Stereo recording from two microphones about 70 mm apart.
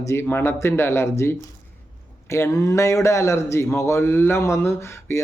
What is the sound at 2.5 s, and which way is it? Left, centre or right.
Speech, left.